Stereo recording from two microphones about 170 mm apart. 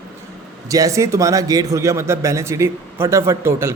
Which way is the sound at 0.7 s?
20° right (ahead or behind).